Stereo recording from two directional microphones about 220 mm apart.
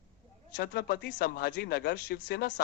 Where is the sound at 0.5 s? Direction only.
45° left (ahead or behind).